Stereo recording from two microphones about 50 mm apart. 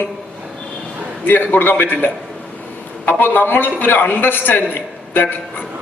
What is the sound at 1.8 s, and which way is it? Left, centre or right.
Speech, left.